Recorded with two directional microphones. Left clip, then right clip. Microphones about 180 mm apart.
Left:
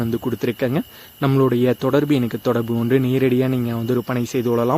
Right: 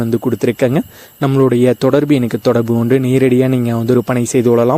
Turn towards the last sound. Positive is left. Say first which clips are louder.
# right 7 dB
turn(degrees=-35)  # may be behind; listen again after turning